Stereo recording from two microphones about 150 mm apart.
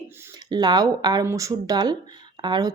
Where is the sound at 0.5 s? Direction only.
25° right (ahead or behind).